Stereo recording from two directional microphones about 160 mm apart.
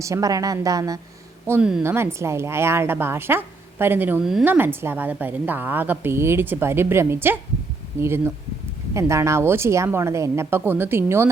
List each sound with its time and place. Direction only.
0.0 s a woman's voice: 20° right (ahead or behind); by 4.4 s centre (ahead or behind)
4.4 s a woman's voice: 15° right (ahead or behind)